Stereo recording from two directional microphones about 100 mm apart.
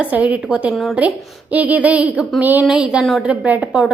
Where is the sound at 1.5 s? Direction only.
15° right (ahead or behind).